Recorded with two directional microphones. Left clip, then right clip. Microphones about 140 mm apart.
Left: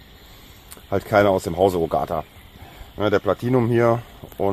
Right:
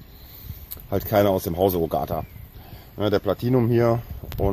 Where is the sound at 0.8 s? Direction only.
Centre (ahead or behind).